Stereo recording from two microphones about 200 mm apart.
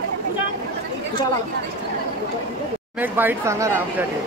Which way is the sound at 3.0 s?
10° right (ahead or behind).